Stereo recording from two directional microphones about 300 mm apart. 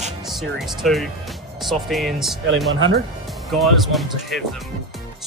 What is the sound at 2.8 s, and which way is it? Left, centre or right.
Speech, right.